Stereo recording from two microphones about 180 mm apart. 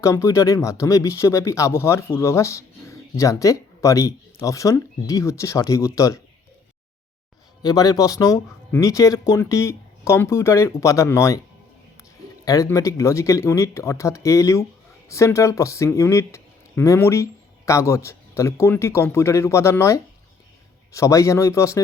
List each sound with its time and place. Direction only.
0.0 s speech: 15° left (ahead or behind)
7.6 s speech: 20° left (ahead or behind)
12.5 s speech: 20° left (ahead or behind)